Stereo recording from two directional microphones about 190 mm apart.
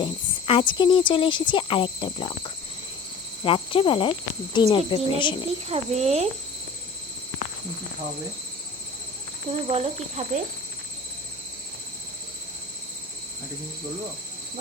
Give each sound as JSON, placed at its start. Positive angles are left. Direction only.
{"t": 0.0, "sound": "speech", "side_deg": 25}
{"t": 5.6, "sound": "speech", "side_deg": -35}
{"t": 9.5, "sound": "speech", "side_deg": -30}